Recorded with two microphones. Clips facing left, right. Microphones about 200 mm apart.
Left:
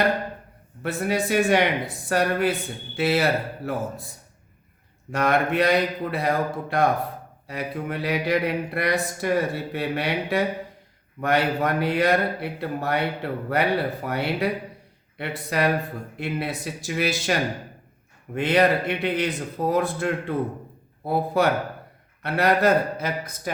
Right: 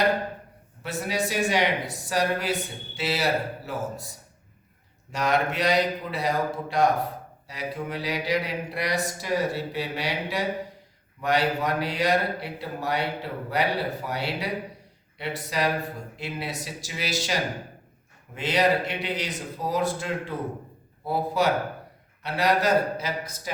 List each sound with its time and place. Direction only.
0.8 s speech: 55° left (ahead or behind)
5.1 s speech: 55° left (ahead or behind)
18.3 s speech: 55° left (ahead or behind)